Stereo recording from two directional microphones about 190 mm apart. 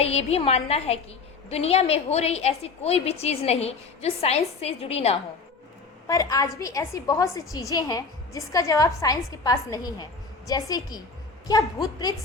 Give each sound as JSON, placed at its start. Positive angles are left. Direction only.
{"t": 0.3, "sound": "a woman's voice", "side_deg": 35}
{"t": 6.1, "sound": "a woman's voice", "side_deg": 15}